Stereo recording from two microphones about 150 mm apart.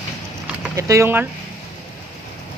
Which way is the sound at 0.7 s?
20° right (ahead or behind).